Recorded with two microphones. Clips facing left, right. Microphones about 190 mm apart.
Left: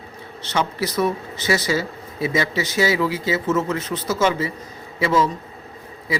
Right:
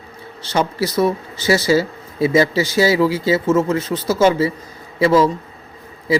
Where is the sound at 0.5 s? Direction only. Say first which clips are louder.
Right 4 dB; 30° right (ahead or behind).